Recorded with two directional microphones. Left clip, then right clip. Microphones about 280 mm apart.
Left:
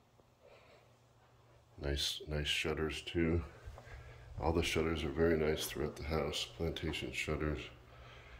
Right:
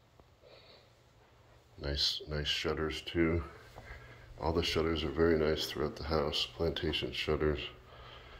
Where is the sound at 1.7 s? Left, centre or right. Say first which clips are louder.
Right 5 dB; centre.